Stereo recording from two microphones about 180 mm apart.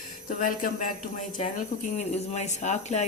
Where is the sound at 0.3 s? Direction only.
50° left (ahead or behind).